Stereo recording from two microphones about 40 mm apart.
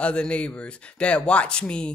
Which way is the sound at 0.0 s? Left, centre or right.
Left.